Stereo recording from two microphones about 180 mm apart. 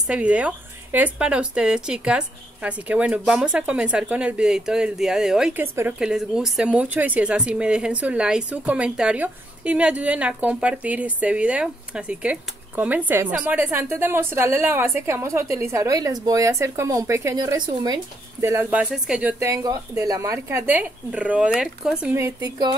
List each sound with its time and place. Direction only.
0.0 s speech: 5° right (ahead or behind)
19.4 s speech: 20° right (ahead or behind)
22.2 s speech: 20° right (ahead or behind)